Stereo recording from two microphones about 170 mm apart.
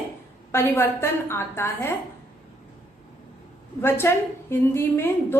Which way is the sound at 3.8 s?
15° left (ahead or behind).